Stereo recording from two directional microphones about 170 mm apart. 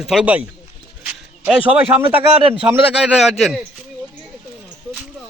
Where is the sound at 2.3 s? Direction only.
35° right (ahead or behind).